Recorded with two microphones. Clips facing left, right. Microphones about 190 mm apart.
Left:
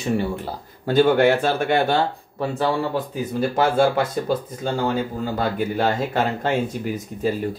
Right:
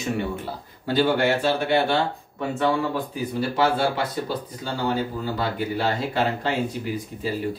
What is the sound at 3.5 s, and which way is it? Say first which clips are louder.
Speech: left 4 dB; 50° left (ahead or behind).